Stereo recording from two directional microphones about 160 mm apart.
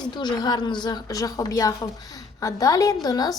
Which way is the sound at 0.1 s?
25° left (ahead or behind).